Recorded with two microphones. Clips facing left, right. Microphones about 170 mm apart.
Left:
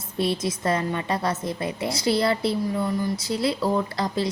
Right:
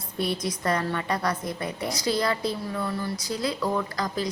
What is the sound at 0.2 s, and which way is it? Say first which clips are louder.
A woman's voice: left 3 dB; 25° left (ahead or behind).